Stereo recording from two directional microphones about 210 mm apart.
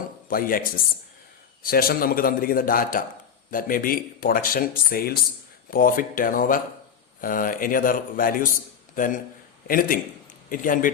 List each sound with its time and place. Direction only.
0.3 s speech: 40° left (ahead or behind)